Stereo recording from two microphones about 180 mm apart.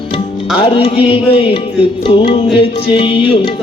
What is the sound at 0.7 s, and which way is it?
Music, 30° left (ahead or behind).